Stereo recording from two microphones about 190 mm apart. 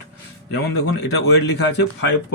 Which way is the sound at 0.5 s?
60° left (ahead or behind).